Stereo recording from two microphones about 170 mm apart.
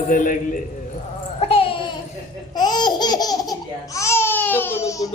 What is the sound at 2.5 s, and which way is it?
Laughter, 25° left (ahead or behind).